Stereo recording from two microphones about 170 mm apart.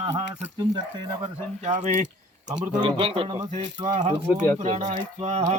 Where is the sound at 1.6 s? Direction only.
45° right (ahead or behind).